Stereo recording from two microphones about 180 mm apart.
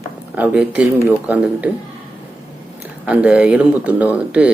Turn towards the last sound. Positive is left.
turn(degrees=-10)  # may be behind; listen again after turning